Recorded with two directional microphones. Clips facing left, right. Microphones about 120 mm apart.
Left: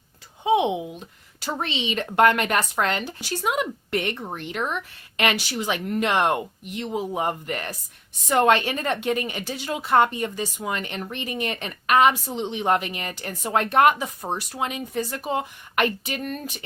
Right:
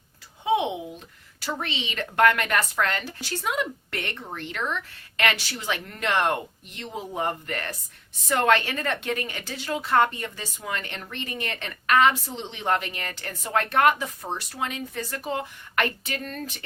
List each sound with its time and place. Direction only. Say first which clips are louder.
0.4 s a woman's voice: left 3 dB; 20° left (ahead or behind)